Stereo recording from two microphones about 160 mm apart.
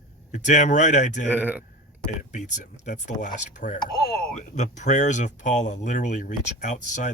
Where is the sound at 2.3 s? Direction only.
50° left (ahead or behind).